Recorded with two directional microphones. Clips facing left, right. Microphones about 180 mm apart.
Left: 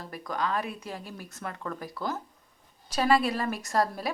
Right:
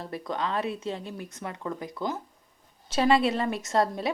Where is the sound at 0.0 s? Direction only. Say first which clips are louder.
Right 1 dB; 25° right (ahead or behind).